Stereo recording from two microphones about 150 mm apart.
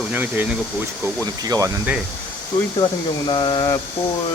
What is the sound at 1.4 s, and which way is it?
Speech, 25° right (ahead or behind).